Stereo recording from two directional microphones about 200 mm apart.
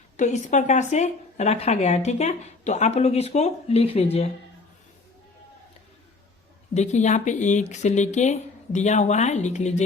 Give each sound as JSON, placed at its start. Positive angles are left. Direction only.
{"t": 0.2, "sound": "speech", "side_deg": 35}
{"t": 6.7, "sound": "speech", "side_deg": 35}